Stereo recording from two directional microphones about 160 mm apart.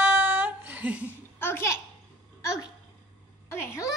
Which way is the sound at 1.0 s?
15° left (ahead or behind).